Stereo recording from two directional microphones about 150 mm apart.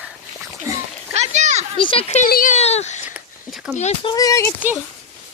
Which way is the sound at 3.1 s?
10° right (ahead or behind).